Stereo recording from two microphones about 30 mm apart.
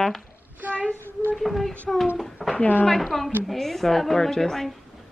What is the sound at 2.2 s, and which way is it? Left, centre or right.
A woman's voice, centre.